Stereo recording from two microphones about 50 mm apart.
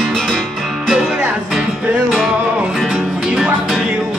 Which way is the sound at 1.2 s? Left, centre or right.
Centre.